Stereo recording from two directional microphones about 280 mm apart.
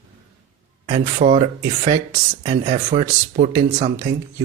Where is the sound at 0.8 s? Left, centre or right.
Centre.